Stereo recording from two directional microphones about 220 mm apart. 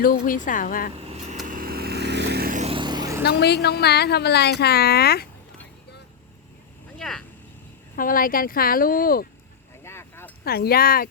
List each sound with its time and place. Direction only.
0.0 s speech: 40° left (ahead or behind)
0.9 s vehicle: 25° right (ahead or behind)
1.5 s vehicle: 40° right (ahead or behind); by 3.2 s 15° right (ahead or behind)
3.2 s a woman's voice: 50° left (ahead or behind)
7.0 s speech: 5° left (ahead or behind)
7.9 s speech: 40° left (ahead or behind)
9.8 s a sound: 10° left (ahead or behind)
10.4 s a woman's voice: 45° left (ahead or behind)